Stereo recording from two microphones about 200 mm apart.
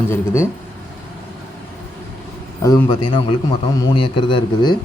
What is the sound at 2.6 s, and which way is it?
A man's voice, 15° left (ahead or behind).